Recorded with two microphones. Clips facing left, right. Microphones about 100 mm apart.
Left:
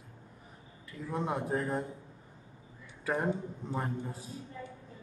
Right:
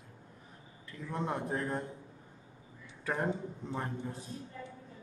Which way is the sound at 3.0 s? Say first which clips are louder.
Left 2 dB; 5° left (ahead or behind).